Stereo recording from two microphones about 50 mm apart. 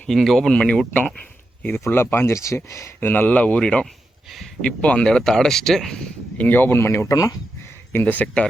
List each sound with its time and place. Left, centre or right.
0.1 s speech: centre
0.5 s speech: left
1.0 s a sound: left
1.9 s speech: left
2.3 s speech: left
3.0 s speech: left; by 6.1 s centre
6.3 s speech: left
6.7 s speech: left
7.9 s speech: left